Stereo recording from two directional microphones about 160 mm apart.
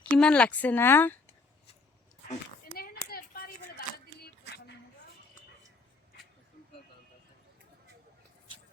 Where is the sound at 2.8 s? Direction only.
70° left (ahead or behind).